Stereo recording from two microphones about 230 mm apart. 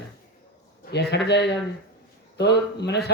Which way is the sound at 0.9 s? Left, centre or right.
Left.